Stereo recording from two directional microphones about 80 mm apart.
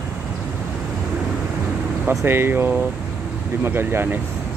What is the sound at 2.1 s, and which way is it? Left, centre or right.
Speech, right.